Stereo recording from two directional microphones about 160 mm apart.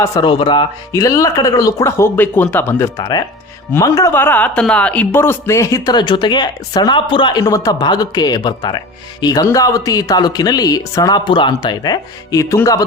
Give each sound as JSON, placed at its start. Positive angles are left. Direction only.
{"t": 0.0, "sound": "speech", "side_deg": 25}